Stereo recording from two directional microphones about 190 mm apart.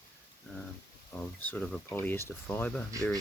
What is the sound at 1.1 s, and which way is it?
Speech, 10° left (ahead or behind).